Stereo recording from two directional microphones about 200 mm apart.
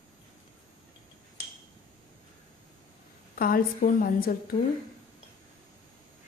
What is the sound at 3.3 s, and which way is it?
A woman's voice, 45° left (ahead or behind).